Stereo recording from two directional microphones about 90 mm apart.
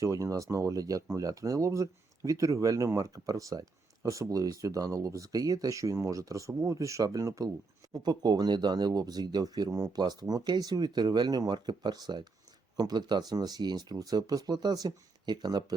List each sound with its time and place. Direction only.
0.0 s speech: 40° right (ahead or behind)